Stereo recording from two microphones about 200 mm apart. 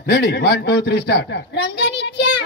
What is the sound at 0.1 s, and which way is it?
A woman's voice, 55° left (ahead or behind).